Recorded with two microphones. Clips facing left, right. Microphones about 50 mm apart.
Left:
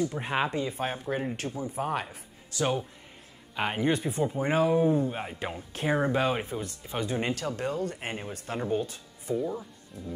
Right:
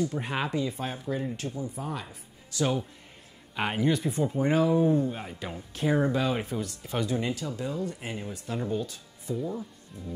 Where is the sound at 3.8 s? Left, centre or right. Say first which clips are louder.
Right 1 dB; centre.